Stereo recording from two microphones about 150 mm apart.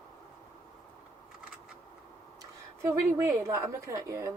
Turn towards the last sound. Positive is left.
turn(degrees=-20)  # may be behind; listen again after turning